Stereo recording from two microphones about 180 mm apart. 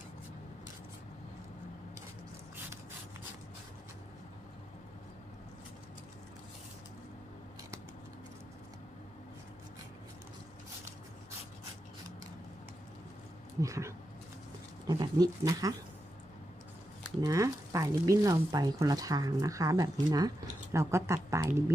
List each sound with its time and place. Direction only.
13.6 s speech: 15° right (ahead or behind)
17.2 s speech: 20° right (ahead or behind)